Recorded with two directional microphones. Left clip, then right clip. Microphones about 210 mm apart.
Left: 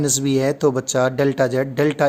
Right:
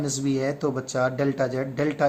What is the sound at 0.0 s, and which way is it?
Speech, 55° left (ahead or behind).